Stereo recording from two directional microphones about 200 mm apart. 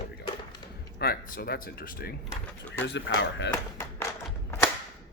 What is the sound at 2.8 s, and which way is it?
Speech, 65° left (ahead or behind).